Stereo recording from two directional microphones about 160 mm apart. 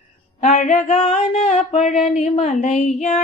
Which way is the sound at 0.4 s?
50° left (ahead or behind).